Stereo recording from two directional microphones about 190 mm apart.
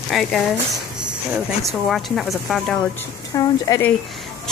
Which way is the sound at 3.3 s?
20° left (ahead or behind).